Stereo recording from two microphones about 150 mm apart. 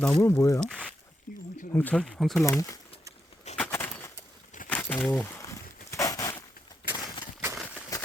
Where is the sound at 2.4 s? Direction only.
20° left (ahead or behind).